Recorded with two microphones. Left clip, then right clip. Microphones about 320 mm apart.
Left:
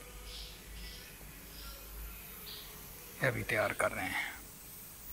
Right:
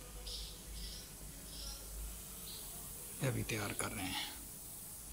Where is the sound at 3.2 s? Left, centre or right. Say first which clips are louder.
Left 9 dB; centre.